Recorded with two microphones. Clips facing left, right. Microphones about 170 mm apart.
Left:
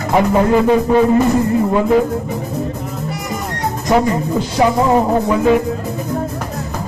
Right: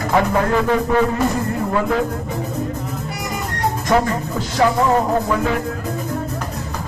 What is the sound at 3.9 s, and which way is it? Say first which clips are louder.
Speech: left 5 dB; 15° left (ahead or behind).